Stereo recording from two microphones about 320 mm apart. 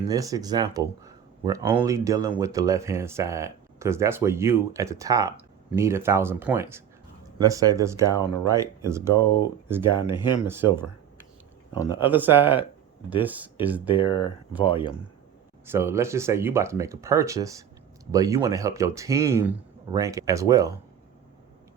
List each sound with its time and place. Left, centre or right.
0.0 s speech: centre
9.1 s speech: centre
9.6 s speech: centre
11.7 s speech: centre
12.1 s speech: centre
13.8 s speech: centre
15.6 s speech: centre